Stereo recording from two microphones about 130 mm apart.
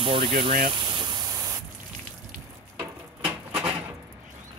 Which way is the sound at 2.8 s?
10° right (ahead or behind).